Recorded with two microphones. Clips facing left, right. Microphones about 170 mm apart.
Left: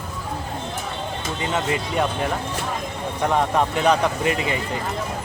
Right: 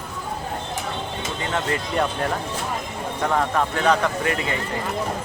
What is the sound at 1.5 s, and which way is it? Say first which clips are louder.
Speech: even; 10° left (ahead or behind).